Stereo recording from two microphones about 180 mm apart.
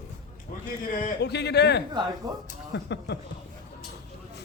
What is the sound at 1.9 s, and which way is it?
Speech, 25° right (ahead or behind).